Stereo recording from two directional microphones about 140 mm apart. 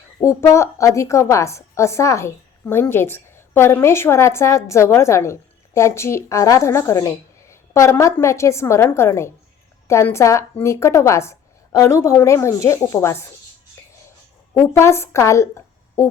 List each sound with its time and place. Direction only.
0.2 s a woman's voice: 20° left (ahead or behind)
14.5 s a woman's voice: 20° left (ahead or behind)